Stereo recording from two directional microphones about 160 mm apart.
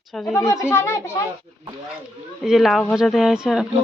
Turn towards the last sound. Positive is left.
turn(degrees=-5)  # may be behind; listen again after turning